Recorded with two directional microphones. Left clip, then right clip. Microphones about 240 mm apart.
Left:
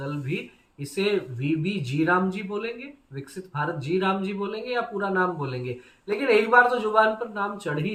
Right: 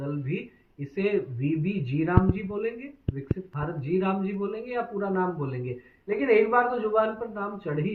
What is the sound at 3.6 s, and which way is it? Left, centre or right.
A man's voice, centre.